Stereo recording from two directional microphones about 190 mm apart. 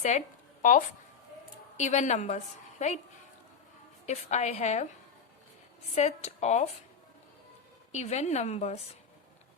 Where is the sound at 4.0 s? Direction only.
35° left (ahead or behind).